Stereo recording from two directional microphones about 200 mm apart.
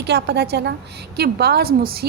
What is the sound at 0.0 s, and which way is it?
A woman's voice, 55° right (ahead or behind).